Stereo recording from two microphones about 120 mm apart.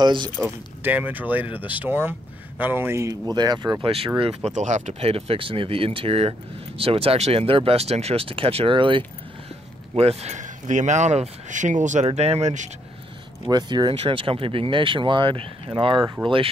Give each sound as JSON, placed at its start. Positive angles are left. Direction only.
{"t": 0.0, "sound": "speech", "side_deg": -40}
{"t": 0.8, "sound": "speech", "side_deg": -15}
{"t": 3.8, "sound": "speech", "side_deg": -50}
{"t": 5.0, "sound": "speech", "side_deg": -55}
{"t": 9.9, "sound": "speech", "side_deg": -60}
{"t": 12.2, "sound": "speech", "side_deg": -65}
{"t": 13.5, "sound": "speech", "side_deg": -35}